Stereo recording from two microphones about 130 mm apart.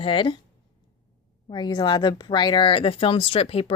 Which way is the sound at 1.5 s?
35° left (ahead or behind).